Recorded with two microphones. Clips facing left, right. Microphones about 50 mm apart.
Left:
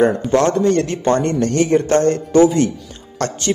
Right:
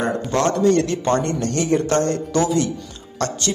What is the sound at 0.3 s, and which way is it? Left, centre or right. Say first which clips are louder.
Speech: left 3 dB; left.